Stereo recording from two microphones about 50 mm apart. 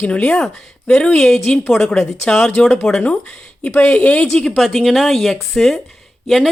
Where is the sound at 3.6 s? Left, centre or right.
Left.